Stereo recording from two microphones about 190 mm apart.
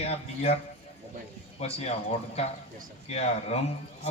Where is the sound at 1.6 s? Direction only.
35° left (ahead or behind).